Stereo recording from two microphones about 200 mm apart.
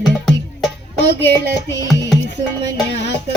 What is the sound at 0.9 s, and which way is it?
Music, 65° left (ahead or behind).